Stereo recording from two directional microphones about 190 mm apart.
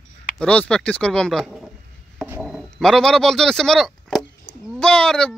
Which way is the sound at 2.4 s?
Centre (ahead or behind).